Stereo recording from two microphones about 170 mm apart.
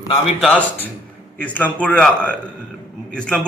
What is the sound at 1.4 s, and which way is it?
A man's voice, 10° left (ahead or behind).